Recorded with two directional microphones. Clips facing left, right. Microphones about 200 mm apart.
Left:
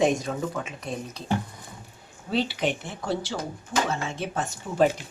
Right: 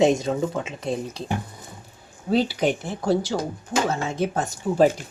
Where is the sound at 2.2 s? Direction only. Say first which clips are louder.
Right 5 dB; 40° right (ahead or behind).